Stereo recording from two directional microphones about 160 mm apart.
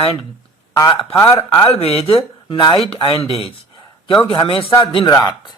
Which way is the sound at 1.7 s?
40° left (ahead or behind).